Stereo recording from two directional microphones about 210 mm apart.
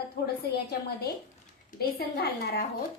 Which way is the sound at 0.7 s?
50° left (ahead or behind).